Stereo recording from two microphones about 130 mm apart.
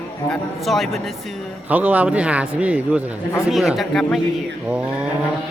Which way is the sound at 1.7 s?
10° right (ahead or behind).